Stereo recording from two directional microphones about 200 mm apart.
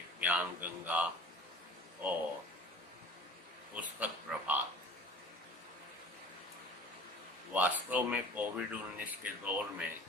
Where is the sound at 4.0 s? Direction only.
10° right (ahead or behind).